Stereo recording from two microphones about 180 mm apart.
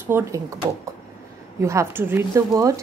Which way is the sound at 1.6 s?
15° right (ahead or behind).